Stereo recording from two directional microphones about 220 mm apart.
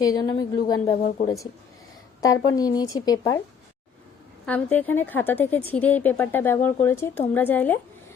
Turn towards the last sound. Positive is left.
turn(degrees=10)  # may be behind; listen again after turning